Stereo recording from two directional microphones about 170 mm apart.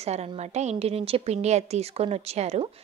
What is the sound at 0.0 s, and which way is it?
A woman's voice, 40° right (ahead or behind).